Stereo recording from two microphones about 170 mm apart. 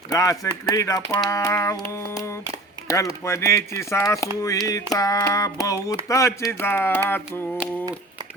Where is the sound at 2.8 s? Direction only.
20° left (ahead or behind).